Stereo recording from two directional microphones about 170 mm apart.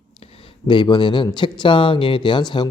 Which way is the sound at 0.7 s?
25° left (ahead or behind).